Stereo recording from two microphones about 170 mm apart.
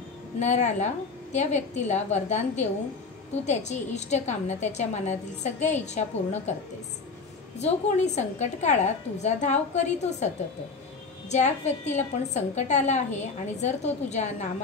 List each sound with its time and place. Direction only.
0.4 s a woman's voice: 45° left (ahead or behind)
7.5 s a woman's voice: 40° left (ahead or behind)